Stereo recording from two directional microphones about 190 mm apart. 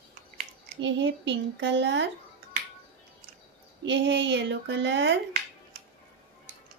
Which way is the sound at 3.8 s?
70° right (ahead or behind).